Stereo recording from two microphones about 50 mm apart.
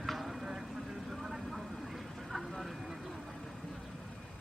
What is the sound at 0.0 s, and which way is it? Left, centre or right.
Clip-clop, centre.